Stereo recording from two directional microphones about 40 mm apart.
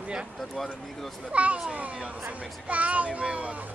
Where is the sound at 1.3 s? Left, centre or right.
Right.